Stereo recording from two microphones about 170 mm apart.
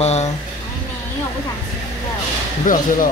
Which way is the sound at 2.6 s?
50° left (ahead or behind).